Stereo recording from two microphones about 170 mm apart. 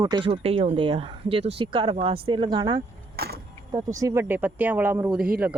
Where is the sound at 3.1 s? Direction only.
70° right (ahead or behind).